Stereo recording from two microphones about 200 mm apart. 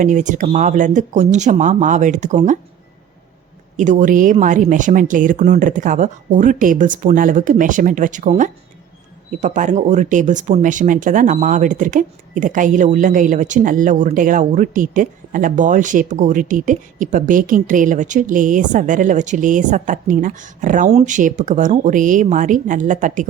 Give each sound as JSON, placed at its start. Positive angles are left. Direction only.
{"t": 0.0, "sound": "speech", "side_deg": -40}
{"t": 3.8, "sound": "speech", "side_deg": -40}